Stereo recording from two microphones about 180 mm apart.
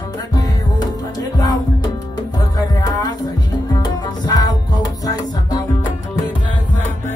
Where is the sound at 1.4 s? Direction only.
20° left (ahead or behind).